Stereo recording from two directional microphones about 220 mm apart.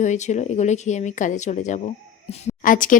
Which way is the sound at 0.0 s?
30° left (ahead or behind).